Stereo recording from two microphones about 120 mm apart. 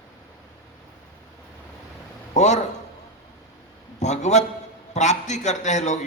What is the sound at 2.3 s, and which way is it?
Speech, 75° left (ahead or behind).